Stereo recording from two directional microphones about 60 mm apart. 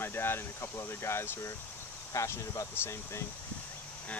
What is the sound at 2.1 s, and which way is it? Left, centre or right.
Speech, left.